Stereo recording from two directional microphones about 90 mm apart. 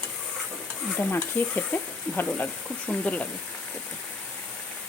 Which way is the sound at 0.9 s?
20° left (ahead or behind).